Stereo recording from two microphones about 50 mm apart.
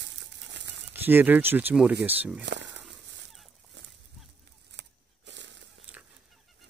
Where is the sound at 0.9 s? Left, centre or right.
Right.